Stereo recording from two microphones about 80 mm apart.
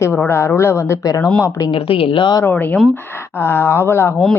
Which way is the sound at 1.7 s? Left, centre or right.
Left.